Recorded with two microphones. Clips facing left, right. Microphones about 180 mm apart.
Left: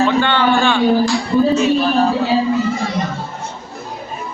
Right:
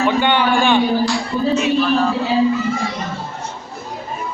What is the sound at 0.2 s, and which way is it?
Speech, 15° right (ahead or behind).